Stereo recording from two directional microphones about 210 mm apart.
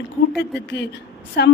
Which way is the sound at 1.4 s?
50° left (ahead or behind).